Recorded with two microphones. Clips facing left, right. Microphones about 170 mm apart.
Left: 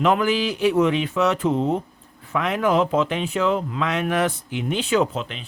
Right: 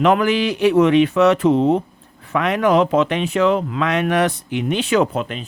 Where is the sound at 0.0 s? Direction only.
70° right (ahead or behind).